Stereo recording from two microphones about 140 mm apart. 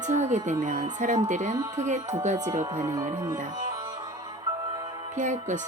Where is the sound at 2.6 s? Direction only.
20° right (ahead or behind).